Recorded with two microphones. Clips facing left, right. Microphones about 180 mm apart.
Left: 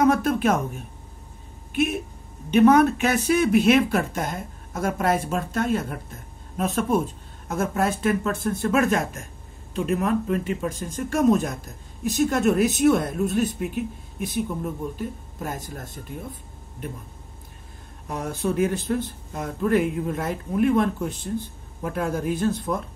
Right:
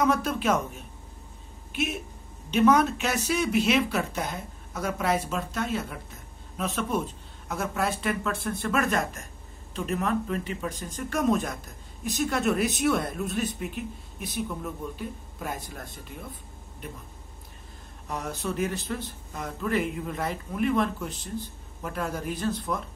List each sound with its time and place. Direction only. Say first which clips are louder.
0.0 s a sound: left 5 dB; 50° left (ahead or behind)
1.7 s speech: left 7 dB; 50° left (ahead or behind)
18.0 s speech: left 5 dB; 50° left (ahead or behind)